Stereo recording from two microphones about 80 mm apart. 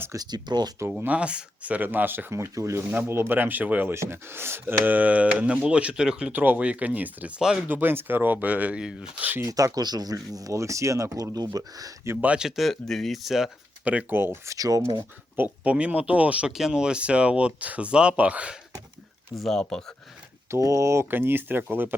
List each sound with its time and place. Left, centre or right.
0.2 s speech: right
0.9 s speech: centre; by 2.8 s right
3.1 s speech: right
3.9 s speech: right; by 7.6 s centre
7.7 s speech: right
9.5 s speech: right
12.2 s speech: centre
13.8 s speech: centre
14.2 s speech: right
14.5 s speech: right
15.4 s speech: centre
19.4 s speech: centre
20.5 s speech: right